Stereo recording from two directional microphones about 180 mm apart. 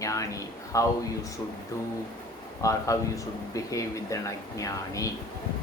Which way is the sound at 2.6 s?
15° left (ahead or behind).